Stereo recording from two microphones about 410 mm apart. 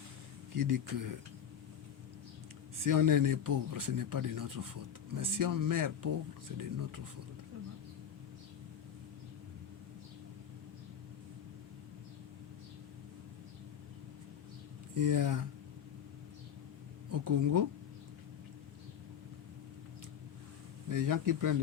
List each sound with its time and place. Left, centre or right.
0.5 s speech: right
2.8 s speech: right
14.9 s speech: right
17.1 s speech: right
20.9 s speech: right